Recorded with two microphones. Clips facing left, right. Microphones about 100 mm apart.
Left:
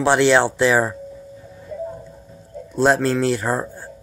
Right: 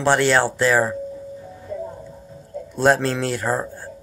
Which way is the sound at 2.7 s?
5° left (ahead or behind).